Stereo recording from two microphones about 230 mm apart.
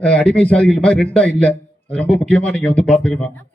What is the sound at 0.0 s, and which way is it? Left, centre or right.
A man's voice, centre.